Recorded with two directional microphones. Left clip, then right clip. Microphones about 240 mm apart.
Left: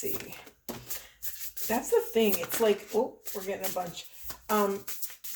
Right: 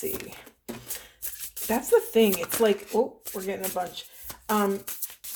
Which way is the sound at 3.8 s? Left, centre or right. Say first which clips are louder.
Right 5 dB; right.